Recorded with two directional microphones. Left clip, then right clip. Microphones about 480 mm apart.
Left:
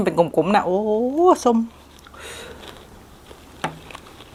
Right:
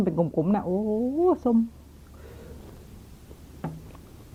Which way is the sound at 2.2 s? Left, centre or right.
Centre.